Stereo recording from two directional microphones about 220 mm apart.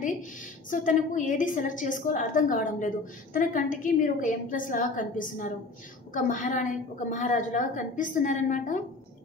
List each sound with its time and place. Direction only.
0.0 s a woman's voice: 35° left (ahead or behind)